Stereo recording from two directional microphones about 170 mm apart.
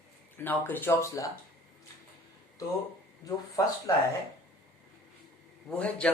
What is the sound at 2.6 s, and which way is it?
Speech, 20° left (ahead or behind).